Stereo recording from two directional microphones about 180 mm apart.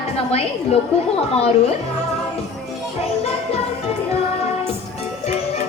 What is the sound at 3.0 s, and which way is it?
Music, 35° left (ahead or behind).